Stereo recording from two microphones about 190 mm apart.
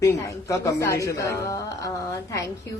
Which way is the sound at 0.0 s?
15° left (ahead or behind).